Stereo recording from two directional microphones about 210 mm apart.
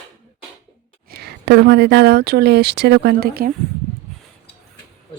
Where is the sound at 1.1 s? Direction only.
50° right (ahead or behind).